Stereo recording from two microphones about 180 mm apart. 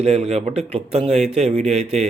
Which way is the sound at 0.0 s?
35° right (ahead or behind).